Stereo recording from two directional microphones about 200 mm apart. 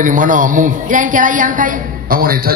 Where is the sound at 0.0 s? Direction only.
40° right (ahead or behind).